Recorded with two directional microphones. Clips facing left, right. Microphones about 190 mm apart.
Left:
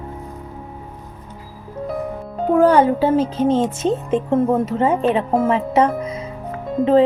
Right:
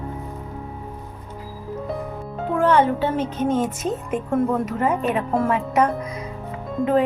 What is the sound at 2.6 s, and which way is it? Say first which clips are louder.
Speech: left 4 dB; 35° left (ahead or behind).